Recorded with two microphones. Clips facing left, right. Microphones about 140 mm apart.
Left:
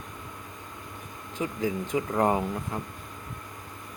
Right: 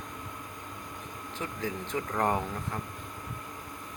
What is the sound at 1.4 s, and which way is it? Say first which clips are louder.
Speech: left 6 dB; 15° left (ahead or behind).